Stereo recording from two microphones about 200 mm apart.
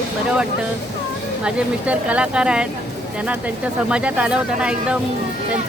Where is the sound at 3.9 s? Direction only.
5° right (ahead or behind).